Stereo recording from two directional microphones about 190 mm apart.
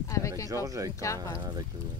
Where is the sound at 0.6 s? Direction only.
20° right (ahead or behind).